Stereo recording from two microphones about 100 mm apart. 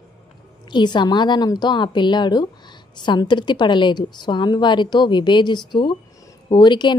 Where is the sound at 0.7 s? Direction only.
50° left (ahead or behind).